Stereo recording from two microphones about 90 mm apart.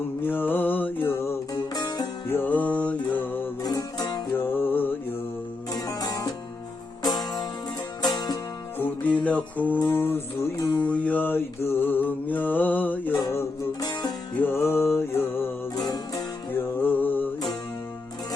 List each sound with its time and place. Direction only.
0.2 s music: 20° left (ahead or behind)
1.5 s music: 50° left (ahead or behind)
2.2 s music: 25° left (ahead or behind)
3.6 s music: 45° left (ahead or behind)
4.4 s music: 25° left (ahead or behind)
5.7 s music: 45° left (ahead or behind)
8.0 s music: 50° left (ahead or behind)
8.8 s music: 20° left (ahead or behind)
13.8 s music: 50° left (ahead or behind)
14.3 s music: 25° left (ahead or behind)
15.7 s music: 45° left (ahead or behind)
16.6 s music: 20° left (ahead or behind)